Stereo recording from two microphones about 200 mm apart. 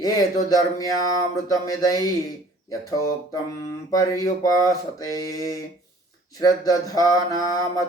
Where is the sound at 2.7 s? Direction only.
15° left (ahead or behind).